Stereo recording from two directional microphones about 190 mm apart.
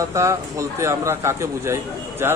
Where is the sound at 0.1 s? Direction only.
15° right (ahead or behind).